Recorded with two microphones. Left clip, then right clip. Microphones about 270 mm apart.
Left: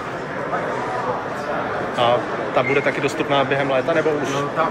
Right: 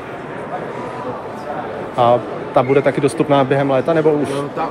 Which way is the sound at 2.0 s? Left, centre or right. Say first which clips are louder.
Right 5 dB; right.